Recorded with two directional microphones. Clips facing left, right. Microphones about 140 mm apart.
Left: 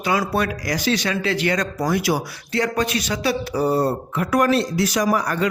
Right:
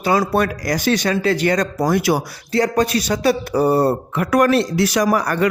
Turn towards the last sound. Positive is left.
turn(degrees=-65)  # may be behind; listen again after turning